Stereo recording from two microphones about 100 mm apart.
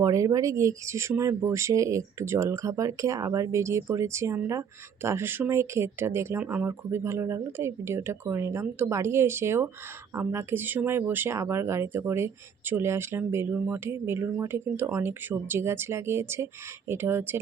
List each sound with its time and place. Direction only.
0.0 s speech: 35° right (ahead or behind)